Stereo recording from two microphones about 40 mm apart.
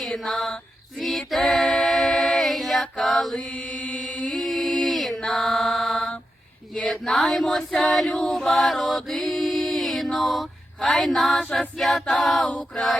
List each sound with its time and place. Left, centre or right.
0.1 s a sound: centre
0.9 s a capella: centre
3.3 s mantra: left
3.9 s chant: centre
4.3 s mantra: centre
6.7 s choir: centre
10.8 s a sound: centre